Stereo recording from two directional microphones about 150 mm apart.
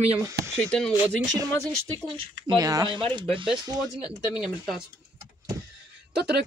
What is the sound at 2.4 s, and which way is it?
Speech, 25° right (ahead or behind).